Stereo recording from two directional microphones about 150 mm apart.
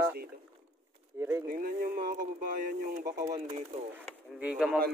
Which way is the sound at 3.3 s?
45° right (ahead or behind).